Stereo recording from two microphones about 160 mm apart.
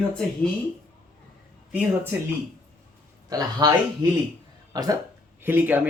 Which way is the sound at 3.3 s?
25° right (ahead or behind).